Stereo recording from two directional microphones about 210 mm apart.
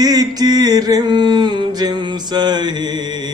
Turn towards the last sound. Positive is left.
turn(degrees=-20)  # may be behind; listen again after turning